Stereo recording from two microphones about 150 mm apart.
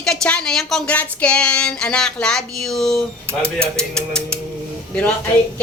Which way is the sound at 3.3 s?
15° right (ahead or behind).